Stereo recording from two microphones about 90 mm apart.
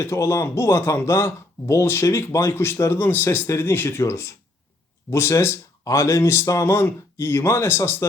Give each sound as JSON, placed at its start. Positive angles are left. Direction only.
{"t": 0.0, "sound": "speech", "side_deg": 30}